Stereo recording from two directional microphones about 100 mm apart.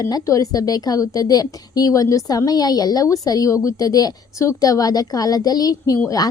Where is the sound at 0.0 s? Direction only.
35° left (ahead or behind).